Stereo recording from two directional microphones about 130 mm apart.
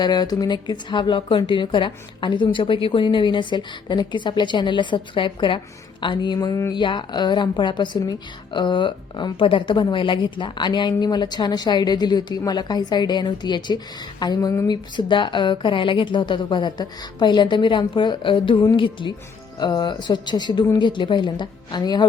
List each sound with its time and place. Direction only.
0.0 s a woman's voice: 30° left (ahead or behind)
14.7 s a woman's voice: 35° left (ahead or behind)